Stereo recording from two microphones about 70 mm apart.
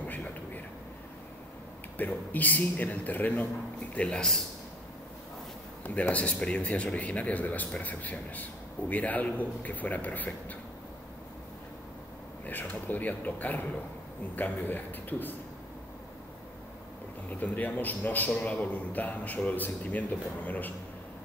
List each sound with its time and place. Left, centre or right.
0.0 s a sound: left
2.0 s a man's voice: left
3.9 s speech: centre
5.9 s a man's voice: left
12.4 s a man's voice: left
17.3 s a man's voice: left